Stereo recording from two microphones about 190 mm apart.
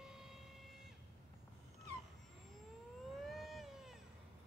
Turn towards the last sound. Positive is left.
turn(degrees=0)  # may be behind; listen again after turning